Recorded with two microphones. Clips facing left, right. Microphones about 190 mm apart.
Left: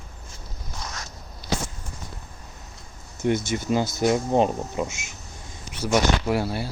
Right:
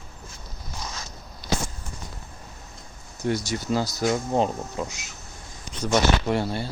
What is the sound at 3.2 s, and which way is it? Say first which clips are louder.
Speech: left 2 dB; 20° left (ahead or behind).